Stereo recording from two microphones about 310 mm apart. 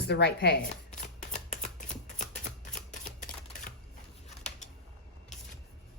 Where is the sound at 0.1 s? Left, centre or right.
Left.